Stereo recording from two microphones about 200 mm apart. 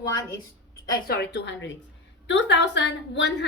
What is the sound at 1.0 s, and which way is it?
A woman's voice, 50° left (ahead or behind).